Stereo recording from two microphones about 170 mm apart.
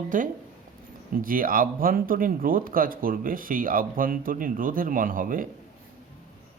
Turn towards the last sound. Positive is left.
turn(degrees=-55)  # may be behind; listen again after turning